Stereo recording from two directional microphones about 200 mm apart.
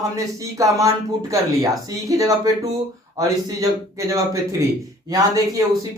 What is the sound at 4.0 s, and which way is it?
A man's voice, 15° right (ahead or behind).